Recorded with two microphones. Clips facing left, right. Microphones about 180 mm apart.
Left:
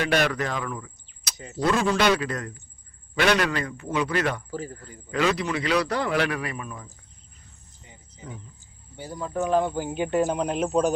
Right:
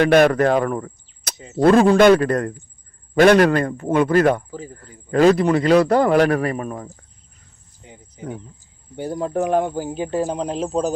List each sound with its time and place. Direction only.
0.0 s a man's voice: 50° right (ahead or behind)
7.9 s a sound: 60° right (ahead or behind)
9.0 s speech: 60° right (ahead or behind); by 10.9 s 25° right (ahead or behind)